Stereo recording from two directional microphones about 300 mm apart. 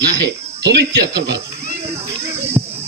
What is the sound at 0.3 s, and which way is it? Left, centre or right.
Speech, right.